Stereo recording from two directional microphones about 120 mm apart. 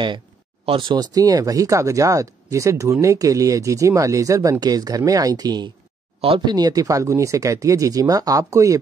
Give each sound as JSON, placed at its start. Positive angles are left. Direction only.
{"t": 0.7, "sound": "speech", "side_deg": -45}
{"t": 1.1, "sound": "speech", "side_deg": -30}
{"t": 6.2, "sound": "speech", "side_deg": -50}
{"t": 6.5, "sound": "speech", "side_deg": -35}